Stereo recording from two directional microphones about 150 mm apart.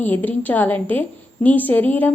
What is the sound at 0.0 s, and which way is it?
A woman's voice, 10° left (ahead or behind).